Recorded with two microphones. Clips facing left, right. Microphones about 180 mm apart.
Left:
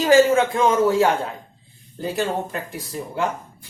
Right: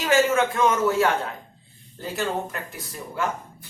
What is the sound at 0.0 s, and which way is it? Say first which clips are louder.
A man's voice: left 5 dB; 35° left (ahead or behind).